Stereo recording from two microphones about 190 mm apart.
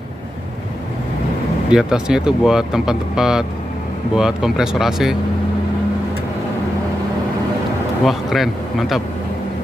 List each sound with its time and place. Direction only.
1.7 s speech: 5° right (ahead or behind)
8.0 s speech: centre (ahead or behind)